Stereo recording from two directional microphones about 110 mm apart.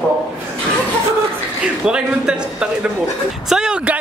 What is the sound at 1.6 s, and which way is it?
Speech, 10° right (ahead or behind).